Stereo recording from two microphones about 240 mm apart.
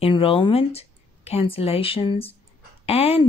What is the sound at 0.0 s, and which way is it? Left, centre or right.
Speech, left.